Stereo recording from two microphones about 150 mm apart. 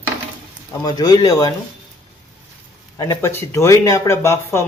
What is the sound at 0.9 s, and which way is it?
Speech, 25° left (ahead or behind).